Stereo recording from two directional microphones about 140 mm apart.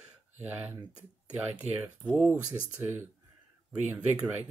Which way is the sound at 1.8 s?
10° right (ahead or behind).